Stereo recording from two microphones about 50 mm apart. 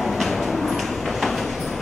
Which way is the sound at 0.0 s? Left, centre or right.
Centre.